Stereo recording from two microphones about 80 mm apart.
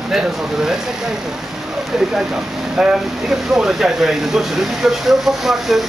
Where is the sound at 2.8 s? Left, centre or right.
Centre.